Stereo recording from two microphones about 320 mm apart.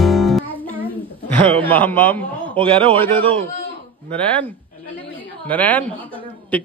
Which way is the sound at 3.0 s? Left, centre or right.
Centre.